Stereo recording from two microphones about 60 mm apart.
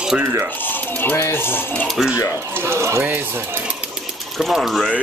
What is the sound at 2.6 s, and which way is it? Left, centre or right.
Speech, right.